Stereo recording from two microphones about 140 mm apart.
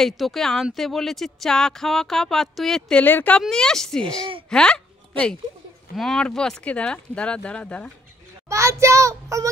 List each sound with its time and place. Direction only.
0.0 s speech: centre (ahead or behind)
8.5 s a child's voice: 20° right (ahead or behind)